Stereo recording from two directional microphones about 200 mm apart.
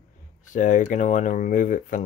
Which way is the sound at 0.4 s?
40° left (ahead or behind).